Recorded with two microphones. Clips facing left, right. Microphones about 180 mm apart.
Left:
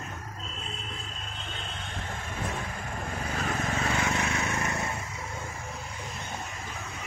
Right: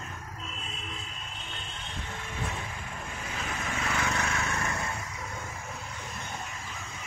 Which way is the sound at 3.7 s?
25° left (ahead or behind).